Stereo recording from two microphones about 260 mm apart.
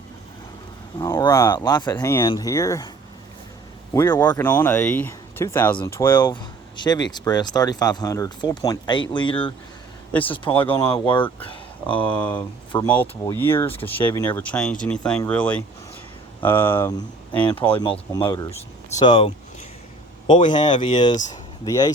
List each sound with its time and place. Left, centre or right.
0.9 s speech: centre
3.9 s speech: centre
10.1 s speech: centre
10.3 s speech: centre
11.9 s speech: centre
12.4 s speech: centre
13.7 s speech: left
17.7 s speech: left